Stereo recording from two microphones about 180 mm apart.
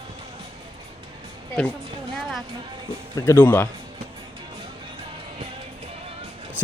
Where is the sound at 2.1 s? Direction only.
Centre (ahead or behind).